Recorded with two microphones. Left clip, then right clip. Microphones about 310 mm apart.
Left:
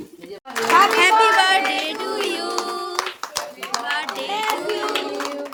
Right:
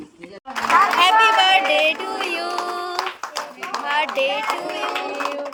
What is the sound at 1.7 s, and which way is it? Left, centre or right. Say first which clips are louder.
Music: right 5 dB; left.